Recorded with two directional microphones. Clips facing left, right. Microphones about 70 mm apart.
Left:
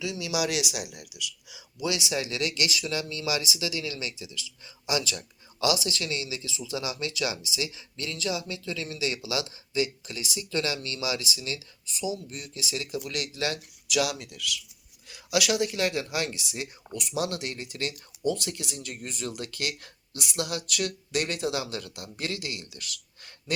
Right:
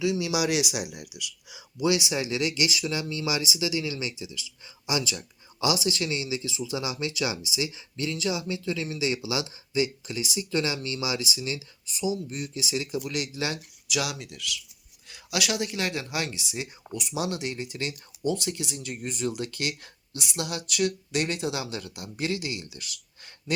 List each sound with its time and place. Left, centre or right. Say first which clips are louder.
0.0 s speech: right 4 dB; right; by 23.3 s centre